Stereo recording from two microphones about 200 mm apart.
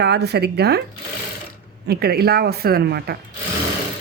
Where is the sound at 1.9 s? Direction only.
50° right (ahead or behind).